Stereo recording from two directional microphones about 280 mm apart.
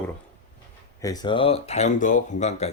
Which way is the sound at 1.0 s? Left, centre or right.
Centre.